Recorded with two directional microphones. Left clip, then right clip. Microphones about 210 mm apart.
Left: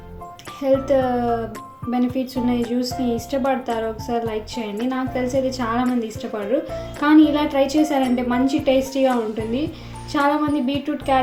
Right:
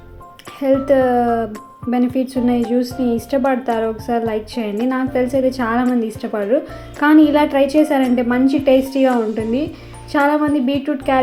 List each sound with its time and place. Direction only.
0.6 s a woman's voice: 15° right (ahead or behind)